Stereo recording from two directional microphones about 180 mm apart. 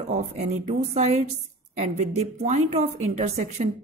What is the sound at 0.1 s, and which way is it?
Speech, 40° right (ahead or behind).